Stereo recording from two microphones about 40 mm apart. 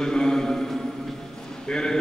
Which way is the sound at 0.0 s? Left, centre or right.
Centre.